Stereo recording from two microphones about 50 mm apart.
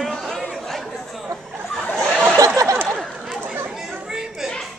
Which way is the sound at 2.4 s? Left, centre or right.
Right.